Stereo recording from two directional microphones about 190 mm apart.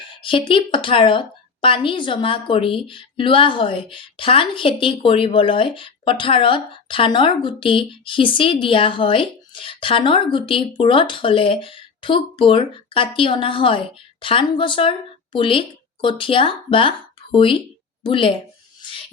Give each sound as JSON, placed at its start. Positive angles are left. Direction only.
{"t": 0.2, "sound": "a woman's voice", "side_deg": 25}